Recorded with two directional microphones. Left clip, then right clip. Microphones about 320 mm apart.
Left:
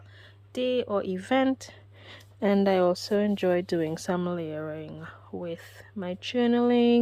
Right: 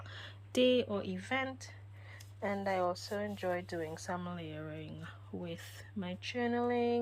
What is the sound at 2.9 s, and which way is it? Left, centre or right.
Speech, left.